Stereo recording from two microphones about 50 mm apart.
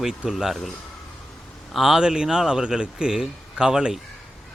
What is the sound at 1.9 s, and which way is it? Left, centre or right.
A man's voice, centre.